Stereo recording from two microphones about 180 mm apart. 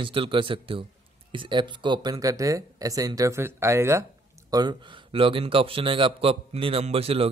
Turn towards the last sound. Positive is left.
turn(degrees=-35)  # may be behind; listen again after turning